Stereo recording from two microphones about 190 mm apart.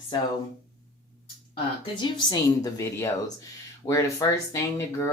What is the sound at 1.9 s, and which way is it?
A woman's voice, 25° left (ahead or behind).